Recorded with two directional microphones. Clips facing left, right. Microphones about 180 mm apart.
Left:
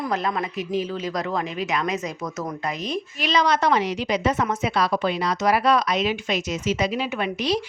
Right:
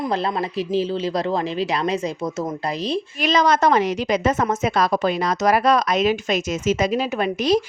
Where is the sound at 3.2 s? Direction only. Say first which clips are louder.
Right 3 dB; 45° right (ahead or behind).